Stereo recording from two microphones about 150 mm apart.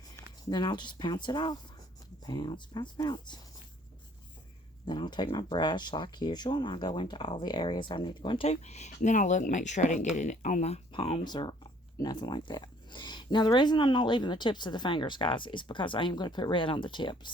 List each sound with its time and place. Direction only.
0.4 s speech: 30° left (ahead or behind)
4.9 s speech: 30° left (ahead or behind); by 10.8 s 50° left (ahead or behind)
10.9 s speech: 35° left (ahead or behind)